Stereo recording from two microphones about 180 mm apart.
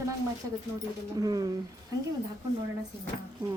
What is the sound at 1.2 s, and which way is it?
Speech, 20° right (ahead or behind).